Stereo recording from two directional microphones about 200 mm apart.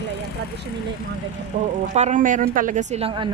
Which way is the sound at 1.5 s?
40° right (ahead or behind).